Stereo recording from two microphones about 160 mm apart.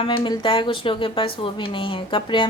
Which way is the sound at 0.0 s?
30° left (ahead or behind).